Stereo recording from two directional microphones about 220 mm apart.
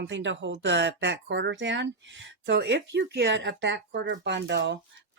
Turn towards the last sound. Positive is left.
turn(degrees=-50)  # may be behind; listen again after turning